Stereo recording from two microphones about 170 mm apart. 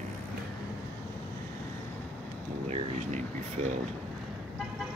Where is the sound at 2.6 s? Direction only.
40° right (ahead or behind).